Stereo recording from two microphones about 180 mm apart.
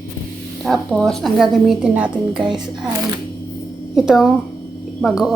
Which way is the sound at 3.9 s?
Centre (ahead or behind).